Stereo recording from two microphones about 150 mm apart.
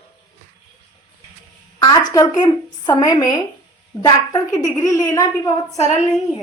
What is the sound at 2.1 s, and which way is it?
A woman's voice, 25° left (ahead or behind).